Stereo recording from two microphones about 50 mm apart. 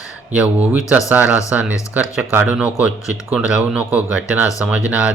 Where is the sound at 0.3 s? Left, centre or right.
Right.